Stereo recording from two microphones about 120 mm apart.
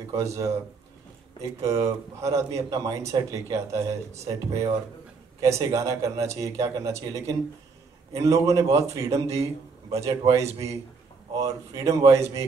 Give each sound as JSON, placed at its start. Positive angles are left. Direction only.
{"t": 0.1, "sound": "a man's voice", "side_deg": -25}
{"t": 1.6, "sound": "a man's voice", "side_deg": -25}
{"t": 8.6, "sound": "a man's voice", "side_deg": -60}
{"t": 8.9, "sound": "a man's voice", "side_deg": -25}